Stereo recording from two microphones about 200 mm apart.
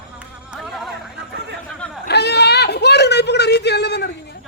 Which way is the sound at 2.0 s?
55° left (ahead or behind).